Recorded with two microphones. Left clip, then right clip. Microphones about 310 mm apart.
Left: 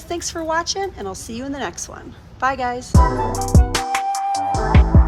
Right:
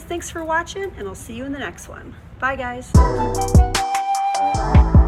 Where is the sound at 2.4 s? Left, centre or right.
Centre.